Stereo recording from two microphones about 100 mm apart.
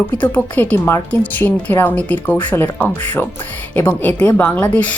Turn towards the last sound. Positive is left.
turn(degrees=15)  # may be behind; listen again after turning